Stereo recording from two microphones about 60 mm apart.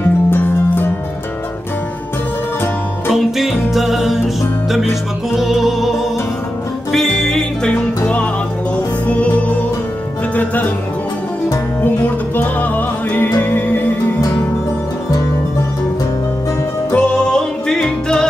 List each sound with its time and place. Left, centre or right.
0.0 s music: left
3.1 s music: centre
5.3 s music: centre
6.9 s music: centre
9.0 s music: left
11.8 s music: left
16.9 s music: centre